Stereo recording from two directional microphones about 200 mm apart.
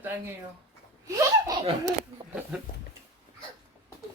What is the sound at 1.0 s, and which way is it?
Speech, 15° right (ahead or behind).